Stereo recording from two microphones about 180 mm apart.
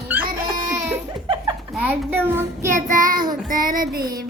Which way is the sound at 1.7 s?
10° right (ahead or behind).